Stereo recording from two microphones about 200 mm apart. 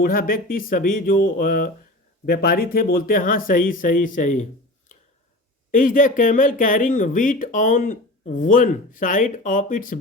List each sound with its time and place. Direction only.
0.0 s speech: 45° left (ahead or behind)
5.7 s speech: 40° left (ahead or behind)